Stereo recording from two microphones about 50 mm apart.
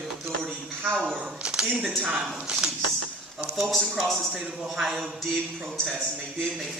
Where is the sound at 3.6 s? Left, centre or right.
Centre.